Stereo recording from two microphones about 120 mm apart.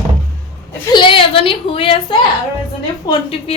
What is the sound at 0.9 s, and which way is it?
A woman's voice, 45° left (ahead or behind).